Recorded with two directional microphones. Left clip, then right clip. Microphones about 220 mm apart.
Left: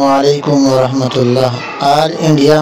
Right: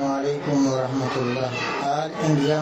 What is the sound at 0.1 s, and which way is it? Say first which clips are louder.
Music: left 15 dB; 35° left (ahead or behind).